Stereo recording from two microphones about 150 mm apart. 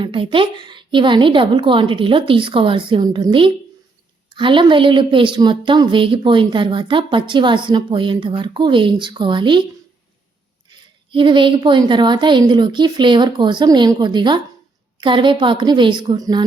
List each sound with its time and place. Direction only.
0.0 s a woman's voice: 35° right (ahead or behind)
10.7 s a woman's voice: 35° right (ahead or behind)